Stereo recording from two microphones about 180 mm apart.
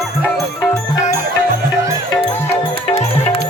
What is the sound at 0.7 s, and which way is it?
Music, 20° left (ahead or behind).